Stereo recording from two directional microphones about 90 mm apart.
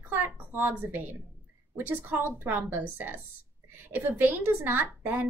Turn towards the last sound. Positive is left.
turn(degrees=-20)  # may be behind; listen again after turning